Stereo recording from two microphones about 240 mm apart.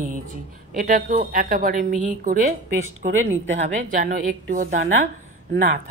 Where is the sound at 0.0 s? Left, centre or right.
Right.